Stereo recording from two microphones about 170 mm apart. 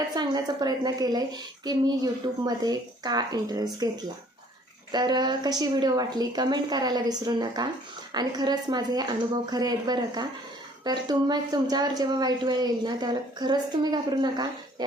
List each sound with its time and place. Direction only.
0.1 s a woman's voice: 25° right (ahead or behind)